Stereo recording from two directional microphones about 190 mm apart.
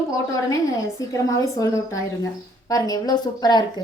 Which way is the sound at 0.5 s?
15° left (ahead or behind).